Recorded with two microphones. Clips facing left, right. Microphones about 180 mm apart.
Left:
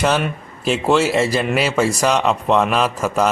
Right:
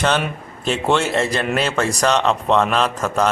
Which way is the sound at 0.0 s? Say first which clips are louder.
Left 1 dB; 5° left (ahead or behind).